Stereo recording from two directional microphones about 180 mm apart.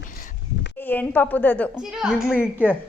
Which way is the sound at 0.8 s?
10° left (ahead or behind).